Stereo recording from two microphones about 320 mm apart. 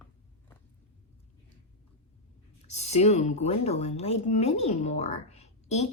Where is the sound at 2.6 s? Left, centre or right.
Centre.